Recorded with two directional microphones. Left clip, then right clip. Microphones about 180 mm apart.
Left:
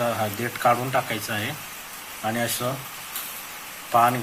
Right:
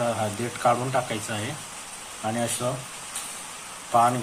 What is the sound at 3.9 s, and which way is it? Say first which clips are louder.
Speech: left 1 dB; 10° left (ahead or behind).